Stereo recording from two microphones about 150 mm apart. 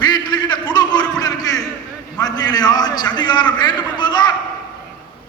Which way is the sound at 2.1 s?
25° left (ahead or behind).